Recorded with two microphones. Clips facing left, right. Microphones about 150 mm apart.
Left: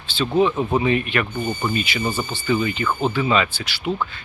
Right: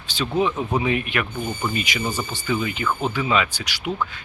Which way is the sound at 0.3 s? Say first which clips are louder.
Left 4 dB; 5° left (ahead or behind).